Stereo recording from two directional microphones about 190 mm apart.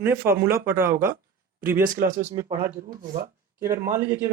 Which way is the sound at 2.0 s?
15° right (ahead or behind).